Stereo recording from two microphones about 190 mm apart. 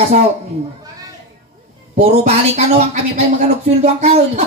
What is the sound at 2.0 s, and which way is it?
Speech, 35° right (ahead or behind).